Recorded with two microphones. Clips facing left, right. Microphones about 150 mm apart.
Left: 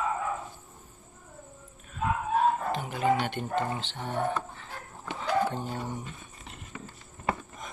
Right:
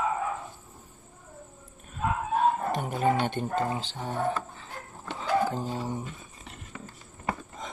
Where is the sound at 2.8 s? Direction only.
45° right (ahead or behind).